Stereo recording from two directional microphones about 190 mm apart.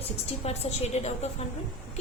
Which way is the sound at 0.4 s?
35° left (ahead or behind).